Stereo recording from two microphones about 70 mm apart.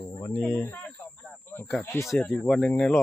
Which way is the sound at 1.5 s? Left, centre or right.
Left.